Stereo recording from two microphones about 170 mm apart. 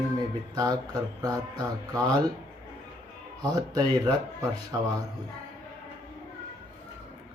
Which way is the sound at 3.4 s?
25° right (ahead or behind).